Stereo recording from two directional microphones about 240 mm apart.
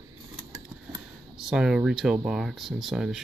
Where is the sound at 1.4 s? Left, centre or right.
Centre.